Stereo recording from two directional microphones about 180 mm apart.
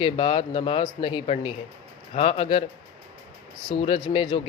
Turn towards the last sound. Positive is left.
turn(degrees=30)  # may be behind; listen again after turning